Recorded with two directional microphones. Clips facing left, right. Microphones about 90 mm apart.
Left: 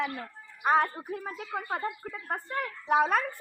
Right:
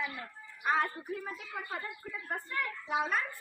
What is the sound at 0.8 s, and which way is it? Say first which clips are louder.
A woman's voice: left 4 dB; 55° left (ahead or behind).